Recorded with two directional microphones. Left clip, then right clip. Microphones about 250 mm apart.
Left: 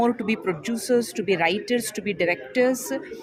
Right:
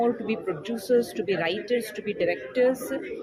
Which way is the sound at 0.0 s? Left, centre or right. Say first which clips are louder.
Left 2 dB; left.